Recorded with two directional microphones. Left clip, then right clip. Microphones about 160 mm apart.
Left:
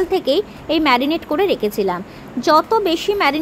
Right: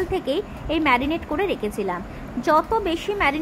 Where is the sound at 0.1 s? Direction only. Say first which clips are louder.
Left 7 dB; 30° left (ahead or behind).